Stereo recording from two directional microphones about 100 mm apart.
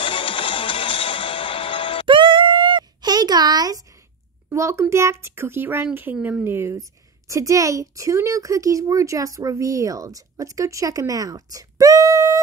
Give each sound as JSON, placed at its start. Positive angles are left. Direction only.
{"t": 0.0, "sound": "music", "side_deg": 60}
{"t": 2.0, "sound": "a sound", "side_deg": -55}
{"t": 4.5, "sound": "a child's voice", "side_deg": -30}
{"t": 6.1, "sound": "speech", "side_deg": -10}
{"t": 6.4, "sound": "a woman's voice", "side_deg": -25}